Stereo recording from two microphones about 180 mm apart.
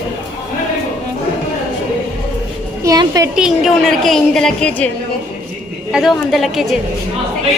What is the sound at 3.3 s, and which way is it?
A woman's voice, 5° right (ahead or behind).